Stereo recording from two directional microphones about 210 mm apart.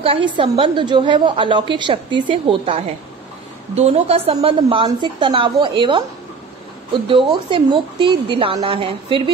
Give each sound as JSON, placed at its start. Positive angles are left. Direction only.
{"t": 0.0, "sound": "a woman's voice", "side_deg": -25}